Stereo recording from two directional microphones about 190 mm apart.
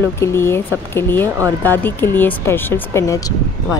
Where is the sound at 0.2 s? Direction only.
15° left (ahead or behind).